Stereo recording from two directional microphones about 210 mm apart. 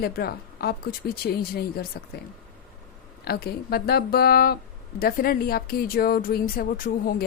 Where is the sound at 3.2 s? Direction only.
50° left (ahead or behind).